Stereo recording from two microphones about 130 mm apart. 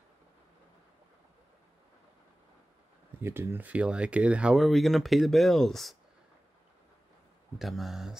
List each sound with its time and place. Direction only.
3.2 s speech: 20° right (ahead or behind); by 5.9 s centre (ahead or behind)
7.5 s speech: centre (ahead or behind)